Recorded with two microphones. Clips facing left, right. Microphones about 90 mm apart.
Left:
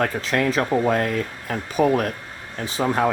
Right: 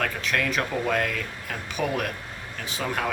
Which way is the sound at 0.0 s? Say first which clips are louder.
Left 5 dB; 30° left (ahead or behind).